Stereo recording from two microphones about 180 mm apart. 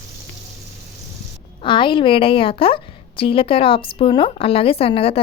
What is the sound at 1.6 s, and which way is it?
A woman's voice, 25° left (ahead or behind).